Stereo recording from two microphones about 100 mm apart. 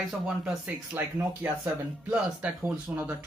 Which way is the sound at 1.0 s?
25° right (ahead or behind).